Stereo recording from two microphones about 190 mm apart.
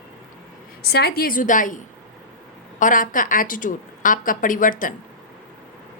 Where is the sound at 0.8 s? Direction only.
55° left (ahead or behind).